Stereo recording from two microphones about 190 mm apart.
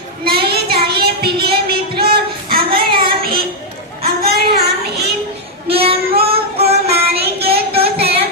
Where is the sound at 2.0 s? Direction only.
55° right (ahead or behind).